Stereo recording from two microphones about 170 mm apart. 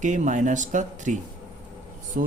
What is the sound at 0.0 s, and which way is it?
Speech, 45° right (ahead or behind).